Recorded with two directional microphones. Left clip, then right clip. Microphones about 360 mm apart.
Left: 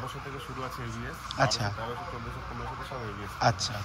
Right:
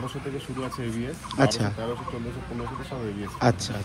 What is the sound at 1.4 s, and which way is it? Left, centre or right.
Speech, centre.